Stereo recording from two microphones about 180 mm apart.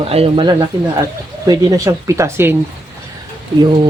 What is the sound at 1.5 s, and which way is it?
Speech, 20° right (ahead or behind).